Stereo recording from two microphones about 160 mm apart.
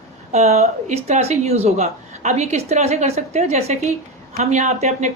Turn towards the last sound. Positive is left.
turn(degrees=-45)  # may be behind; listen again after turning